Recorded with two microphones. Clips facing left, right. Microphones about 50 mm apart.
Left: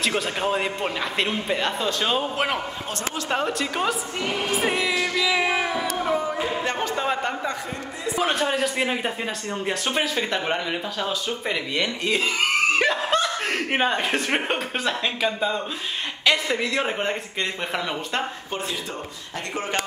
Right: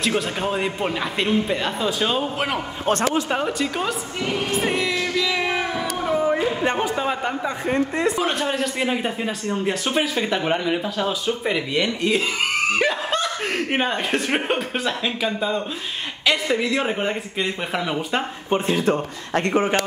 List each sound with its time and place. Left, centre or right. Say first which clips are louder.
0.0 s speech: right 1 dB; centre
4.5 s a sound: left 1 dB; centre
6.6 s speech: right 4 dB; centre
7.0 s a man's voice: right 1 dB; centre
18.7 s speech: right 10 dB; right
19.5 s speech: right 6 dB; right